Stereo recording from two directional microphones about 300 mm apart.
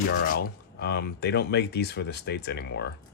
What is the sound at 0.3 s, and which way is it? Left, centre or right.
Speech, left.